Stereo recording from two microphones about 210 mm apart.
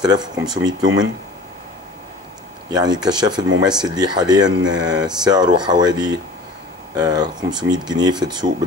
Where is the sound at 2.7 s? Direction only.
20° right (ahead or behind).